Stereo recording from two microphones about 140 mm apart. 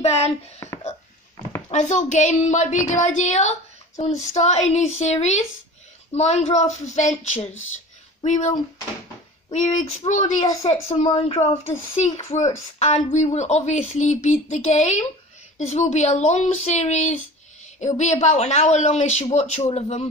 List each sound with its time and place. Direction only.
0.0 s hands: 50° left (ahead or behind)
0.6 s music: 25° left (ahead or behind)
1.7 s a woman's voice: 60° left (ahead or behind)